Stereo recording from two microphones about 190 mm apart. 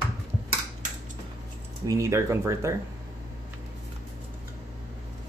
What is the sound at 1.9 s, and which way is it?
Speech, 15° right (ahead or behind).